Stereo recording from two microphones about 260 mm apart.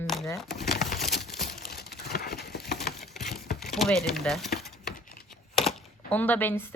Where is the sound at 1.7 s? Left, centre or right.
Left.